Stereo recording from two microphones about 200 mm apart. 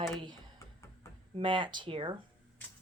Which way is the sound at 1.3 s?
25° right (ahead or behind).